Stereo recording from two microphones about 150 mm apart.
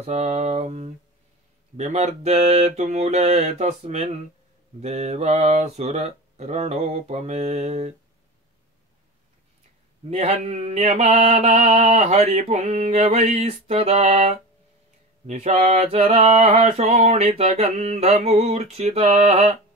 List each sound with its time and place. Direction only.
0.0 s mantra: 45° right (ahead or behind)
10.0 s mantra: 45° right (ahead or behind)